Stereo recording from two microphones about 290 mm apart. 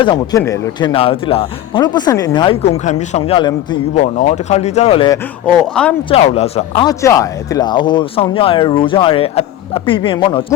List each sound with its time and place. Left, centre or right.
0.0 s speech: centre